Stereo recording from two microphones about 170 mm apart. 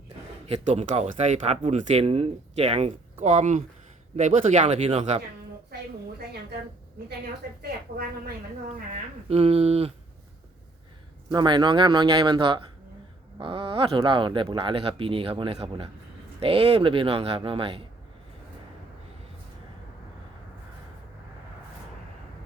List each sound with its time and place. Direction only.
0.4 s speech: 40° right (ahead or behind)
4.6 s speech: 35° right (ahead or behind)
9.3 s speech: 35° right (ahead or behind)
11.3 s speech: 25° right (ahead or behind)